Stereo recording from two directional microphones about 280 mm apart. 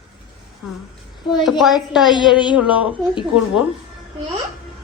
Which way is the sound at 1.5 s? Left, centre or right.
Centre.